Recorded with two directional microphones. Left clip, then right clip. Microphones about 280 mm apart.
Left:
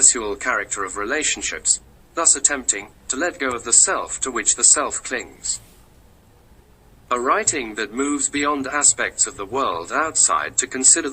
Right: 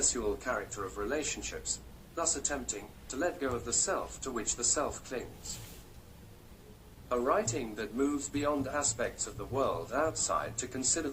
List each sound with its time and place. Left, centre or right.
0.0 s speech: left
7.1 s speech: left